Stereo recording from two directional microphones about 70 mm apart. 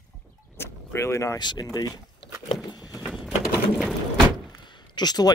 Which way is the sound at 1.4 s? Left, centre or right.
Left.